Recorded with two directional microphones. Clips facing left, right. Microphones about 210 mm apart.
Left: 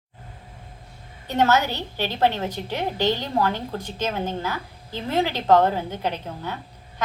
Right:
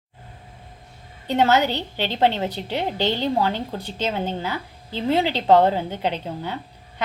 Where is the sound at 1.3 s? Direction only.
15° right (ahead or behind).